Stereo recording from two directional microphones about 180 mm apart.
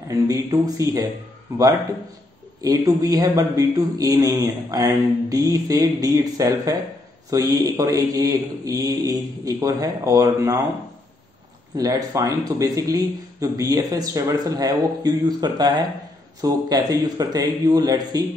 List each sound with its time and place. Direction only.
0.1 s a man's voice: 20° right (ahead or behind)
11.7 s a man's voice: 20° right (ahead or behind)